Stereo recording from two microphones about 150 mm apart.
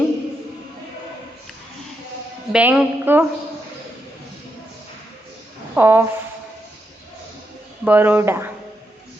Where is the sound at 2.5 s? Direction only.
5° right (ahead or behind).